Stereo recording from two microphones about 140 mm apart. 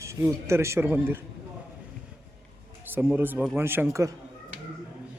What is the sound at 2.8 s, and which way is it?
A man's voice, 15° right (ahead or behind).